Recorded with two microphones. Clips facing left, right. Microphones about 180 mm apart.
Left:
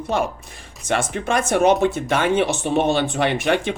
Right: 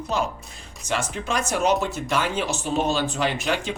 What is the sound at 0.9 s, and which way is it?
Speech, 55° left (ahead or behind).